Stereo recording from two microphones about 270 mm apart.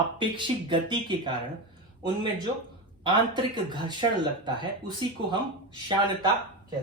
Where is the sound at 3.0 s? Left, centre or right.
Centre.